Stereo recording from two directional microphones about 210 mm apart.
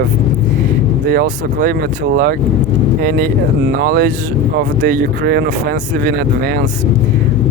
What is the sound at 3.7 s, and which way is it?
Speech, 50° right (ahead or behind).